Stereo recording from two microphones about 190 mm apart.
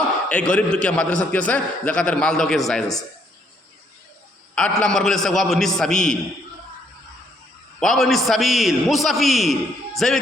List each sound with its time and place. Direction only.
0.3 s a man's voice: 5° left (ahead or behind)
4.5 s a man's voice: 5° left (ahead or behind)
7.8 s a man's voice: centre (ahead or behind)